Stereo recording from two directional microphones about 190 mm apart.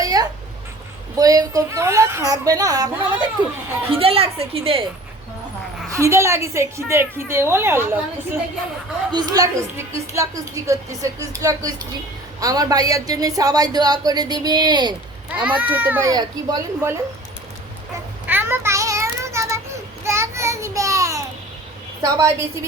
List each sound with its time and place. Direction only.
0.0 s babbling: 20° right (ahead or behind)
1.2 s a woman's voice: 20° right (ahead or behind)
6.0 s a woman's voice: 15° right (ahead or behind)
9.1 s a woman's voice: 20° right (ahead or behind)
15.4 s a woman's voice: 10° right (ahead or behind)
18.3 s child singing: 10° right (ahead or behind)
20.1 s a sound: 15° right (ahead or behind)
22.0 s a woman's voice: 15° right (ahead or behind)